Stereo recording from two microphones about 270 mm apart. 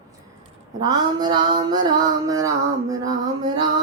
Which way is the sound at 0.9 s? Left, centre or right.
Centre.